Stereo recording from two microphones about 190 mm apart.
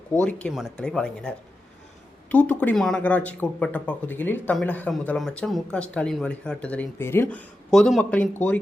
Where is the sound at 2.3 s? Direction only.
10° left (ahead or behind).